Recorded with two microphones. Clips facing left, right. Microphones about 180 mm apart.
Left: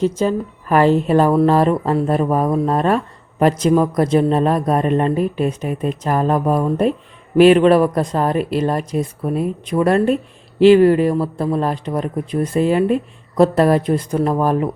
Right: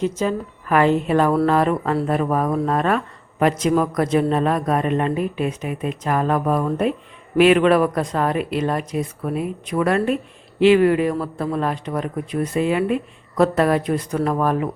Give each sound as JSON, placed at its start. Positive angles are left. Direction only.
{"t": 0.0, "sound": "speech", "side_deg": 35}
{"t": 7.3, "sound": "speech", "side_deg": 35}
{"t": 14.2, "sound": "speech", "side_deg": 20}